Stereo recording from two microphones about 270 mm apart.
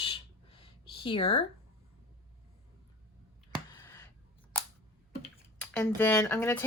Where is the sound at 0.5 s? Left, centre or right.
Centre.